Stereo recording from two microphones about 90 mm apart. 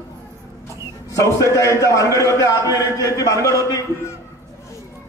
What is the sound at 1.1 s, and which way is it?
A man's voice, 35° left (ahead or behind).